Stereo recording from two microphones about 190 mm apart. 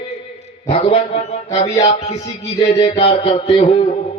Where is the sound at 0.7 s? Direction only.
30° left (ahead or behind).